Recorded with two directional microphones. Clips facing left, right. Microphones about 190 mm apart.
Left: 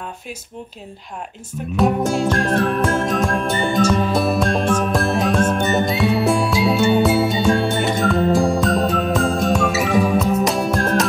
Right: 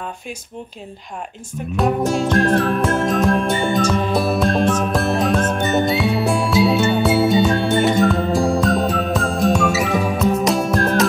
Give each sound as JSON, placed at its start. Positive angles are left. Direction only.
{"t": 1.8, "sound": "music", "side_deg": 0}